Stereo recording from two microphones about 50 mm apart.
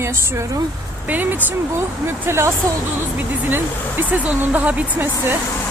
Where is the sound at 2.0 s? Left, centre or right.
Right.